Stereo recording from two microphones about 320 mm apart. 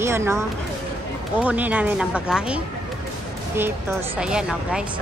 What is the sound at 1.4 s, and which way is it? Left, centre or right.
Speech, centre.